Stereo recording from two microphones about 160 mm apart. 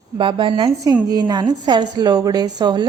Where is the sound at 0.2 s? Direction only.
30° right (ahead or behind).